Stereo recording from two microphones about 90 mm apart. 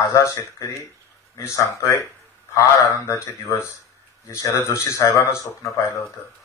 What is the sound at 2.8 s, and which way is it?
Speech, 35° left (ahead or behind).